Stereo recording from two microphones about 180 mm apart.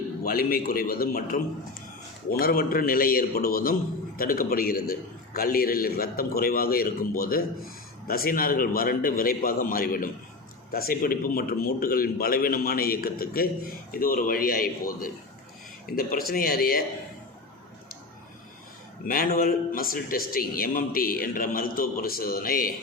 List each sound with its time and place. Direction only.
0.3 s a man's voice: 55° left (ahead or behind)
2.4 s a man's voice: 55° left (ahead or behind)
19.0 s a man's voice: 55° left (ahead or behind)